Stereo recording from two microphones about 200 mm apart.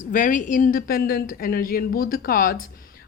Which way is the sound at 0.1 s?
40° left (ahead or behind).